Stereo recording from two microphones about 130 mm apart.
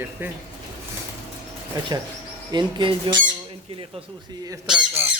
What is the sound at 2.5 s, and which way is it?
Speech, 35° right (ahead or behind).